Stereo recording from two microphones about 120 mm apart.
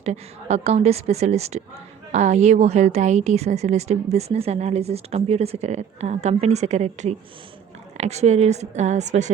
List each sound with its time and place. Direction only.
0.0 s a woman's voice: 65° right (ahead or behind)